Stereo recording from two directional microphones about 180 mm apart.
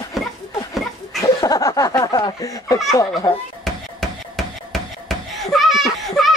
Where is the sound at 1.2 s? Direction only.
20° left (ahead or behind).